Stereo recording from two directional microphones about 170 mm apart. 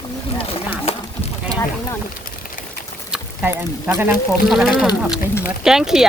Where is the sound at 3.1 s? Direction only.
10° right (ahead or behind).